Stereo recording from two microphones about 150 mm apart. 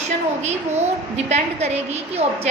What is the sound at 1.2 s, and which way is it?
A woman's voice, 45° right (ahead or behind).